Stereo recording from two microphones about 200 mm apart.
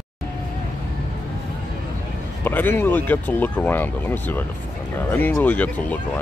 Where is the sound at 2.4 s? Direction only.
10° left (ahead or behind).